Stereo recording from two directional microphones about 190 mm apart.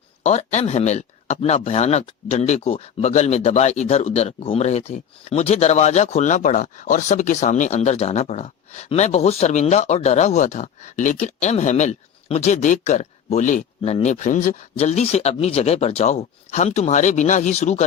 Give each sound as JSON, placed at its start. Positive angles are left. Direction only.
{"t": 0.2, "sound": "speech", "side_deg": 35}